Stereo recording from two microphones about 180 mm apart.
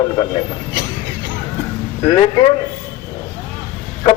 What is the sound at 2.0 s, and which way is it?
Speech, 25° left (ahead or behind).